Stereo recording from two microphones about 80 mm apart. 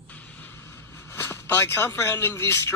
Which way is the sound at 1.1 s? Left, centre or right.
Left.